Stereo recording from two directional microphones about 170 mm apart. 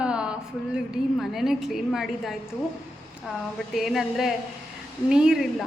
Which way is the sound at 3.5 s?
Centre (ahead or behind).